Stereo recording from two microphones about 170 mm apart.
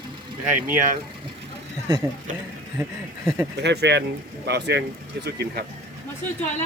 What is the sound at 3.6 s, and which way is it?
Speech, 90° right.